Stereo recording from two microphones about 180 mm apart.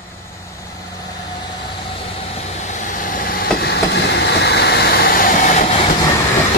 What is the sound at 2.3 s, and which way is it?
Vehicle, 40° left (ahead or behind).